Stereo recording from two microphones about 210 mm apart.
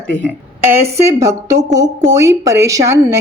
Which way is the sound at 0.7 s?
10° right (ahead or behind).